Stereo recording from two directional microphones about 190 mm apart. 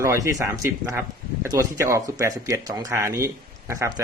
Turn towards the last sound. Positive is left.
turn(degrees=-15)  # may be behind; listen again after turning